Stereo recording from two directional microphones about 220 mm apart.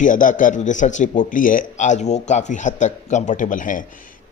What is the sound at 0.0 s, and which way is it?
Speech, 35° left (ahead or behind).